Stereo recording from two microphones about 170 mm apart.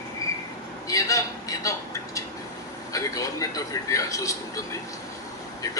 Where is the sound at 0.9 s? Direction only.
20° left (ahead or behind).